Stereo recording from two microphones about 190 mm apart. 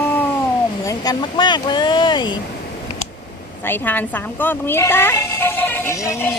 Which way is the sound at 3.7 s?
10° left (ahead or behind).